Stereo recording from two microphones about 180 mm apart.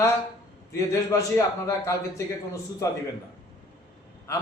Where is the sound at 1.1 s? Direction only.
15° left (ahead or behind).